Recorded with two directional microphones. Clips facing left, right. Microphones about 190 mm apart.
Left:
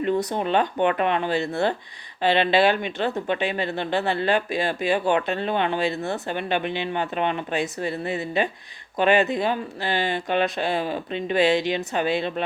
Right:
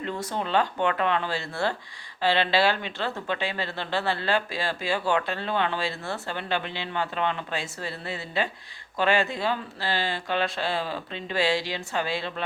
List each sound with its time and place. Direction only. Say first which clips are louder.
0.0 s speech: left 7 dB; 15° left (ahead or behind)